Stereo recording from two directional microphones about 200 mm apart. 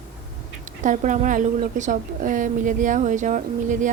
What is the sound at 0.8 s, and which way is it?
A woman's voice, 40° right (ahead or behind).